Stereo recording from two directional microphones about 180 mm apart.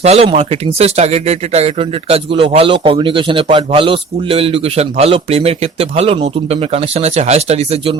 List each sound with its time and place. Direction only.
0.0 s speech: 35° right (ahead or behind)